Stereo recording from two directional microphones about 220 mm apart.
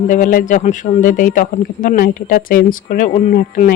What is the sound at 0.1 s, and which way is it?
Speech, 40° left (ahead or behind).